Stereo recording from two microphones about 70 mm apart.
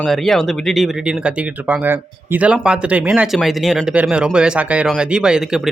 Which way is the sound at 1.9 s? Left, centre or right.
Right.